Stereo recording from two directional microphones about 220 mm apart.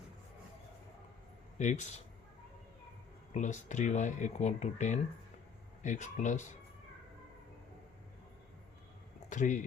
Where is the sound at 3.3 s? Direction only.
30° left (ahead or behind).